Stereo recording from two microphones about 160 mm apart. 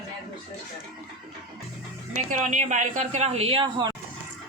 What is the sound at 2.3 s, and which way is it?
A woman's voice, 50° right (ahead or behind).